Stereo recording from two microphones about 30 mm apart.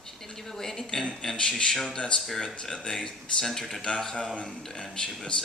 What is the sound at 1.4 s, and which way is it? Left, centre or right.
Speech, left.